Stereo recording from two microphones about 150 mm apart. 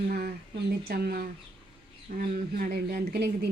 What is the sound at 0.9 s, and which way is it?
Speech, 90° right.